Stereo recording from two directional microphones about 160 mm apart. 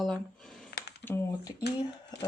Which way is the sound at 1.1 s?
15° left (ahead or behind).